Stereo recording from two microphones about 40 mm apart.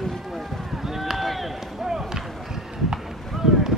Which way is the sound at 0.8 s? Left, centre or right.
Centre.